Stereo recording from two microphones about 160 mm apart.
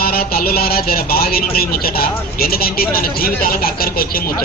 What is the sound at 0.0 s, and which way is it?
Speech, 70° left (ahead or behind).